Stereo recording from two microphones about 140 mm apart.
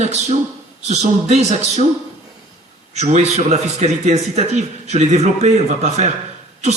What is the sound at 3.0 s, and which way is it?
A man's voice, 55° right (ahead or behind).